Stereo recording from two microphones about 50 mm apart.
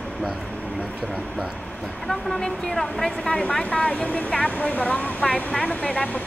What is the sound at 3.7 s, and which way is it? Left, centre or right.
Speech, left.